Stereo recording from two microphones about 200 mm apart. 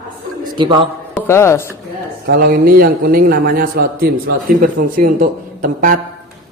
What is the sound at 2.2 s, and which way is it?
A man's voice, 50° right (ahead or behind).